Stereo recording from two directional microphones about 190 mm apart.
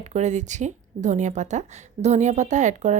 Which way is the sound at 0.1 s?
40° right (ahead or behind).